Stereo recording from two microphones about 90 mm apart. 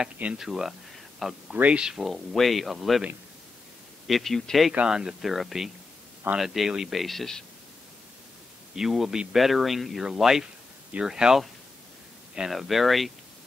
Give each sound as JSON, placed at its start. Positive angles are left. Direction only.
{"t": 0.0, "sound": "speech", "side_deg": -10}
{"t": 4.1, "sound": "speech", "side_deg": 0}
{"t": 8.7, "sound": "speech", "side_deg": -5}